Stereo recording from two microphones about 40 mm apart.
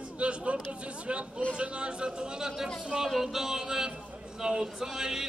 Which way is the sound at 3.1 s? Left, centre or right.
Centre.